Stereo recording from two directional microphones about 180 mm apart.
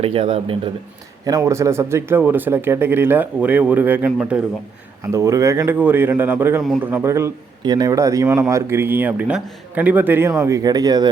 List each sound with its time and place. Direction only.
0.0 s speech: 30° right (ahead or behind)
1.2 s speech: 20° right (ahead or behind)
5.0 s speech: 15° right (ahead or behind)